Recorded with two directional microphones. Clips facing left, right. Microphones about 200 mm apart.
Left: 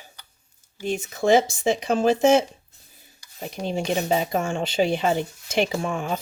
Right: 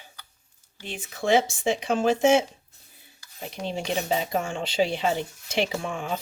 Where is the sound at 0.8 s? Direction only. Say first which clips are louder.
Left 8 dB; 45° left (ahead or behind).